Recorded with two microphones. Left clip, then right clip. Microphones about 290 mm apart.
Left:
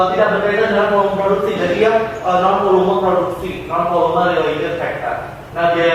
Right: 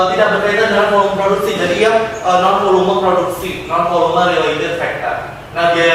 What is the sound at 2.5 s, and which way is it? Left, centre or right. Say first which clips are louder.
Speech: right 1 dB; left.